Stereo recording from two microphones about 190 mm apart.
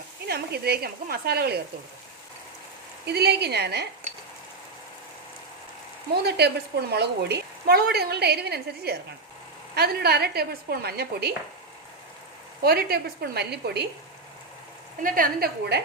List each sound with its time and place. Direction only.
0.3 s a woman's voice: 55° right (ahead or behind)
3.1 s a woman's voice: 60° right (ahead or behind)
6.2 s a woman's voice: 60° right (ahead or behind)
12.6 s a woman's voice: 55° right (ahead or behind)
15.0 s a woman's voice: 50° right (ahead or behind)